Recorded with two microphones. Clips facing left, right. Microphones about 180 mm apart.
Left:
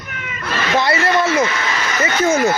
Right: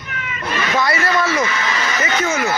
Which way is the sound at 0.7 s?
25° left (ahead or behind).